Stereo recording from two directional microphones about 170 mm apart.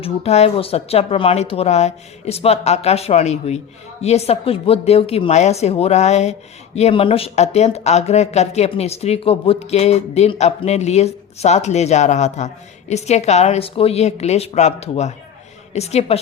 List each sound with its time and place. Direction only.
0.0 s speech: 35° left (ahead or behind)